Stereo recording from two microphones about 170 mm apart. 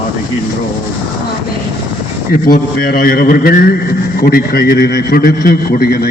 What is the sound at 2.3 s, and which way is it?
A man's voice, 60° left (ahead or behind).